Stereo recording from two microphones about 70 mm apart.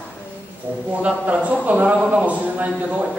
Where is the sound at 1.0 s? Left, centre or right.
Centre.